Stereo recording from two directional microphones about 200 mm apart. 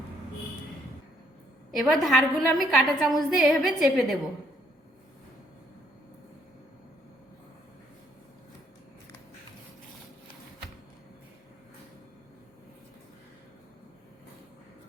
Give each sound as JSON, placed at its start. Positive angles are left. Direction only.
{"t": 1.7, "sound": "a woman's voice", "side_deg": 0}